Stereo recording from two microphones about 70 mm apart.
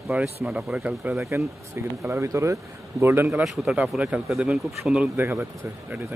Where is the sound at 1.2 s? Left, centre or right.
Right.